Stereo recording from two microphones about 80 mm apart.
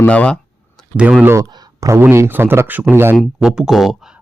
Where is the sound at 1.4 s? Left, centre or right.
Right.